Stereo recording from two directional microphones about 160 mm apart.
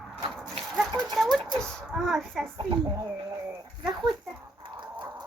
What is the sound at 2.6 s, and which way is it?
Speech, 20° right (ahead or behind).